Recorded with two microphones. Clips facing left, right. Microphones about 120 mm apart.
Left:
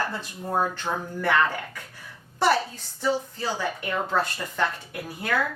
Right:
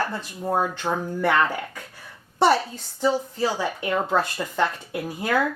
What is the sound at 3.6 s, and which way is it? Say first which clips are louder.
Speech: right 3 dB; 15° right (ahead or behind).